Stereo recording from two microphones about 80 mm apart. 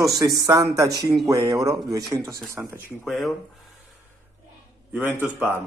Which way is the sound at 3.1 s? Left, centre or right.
Centre.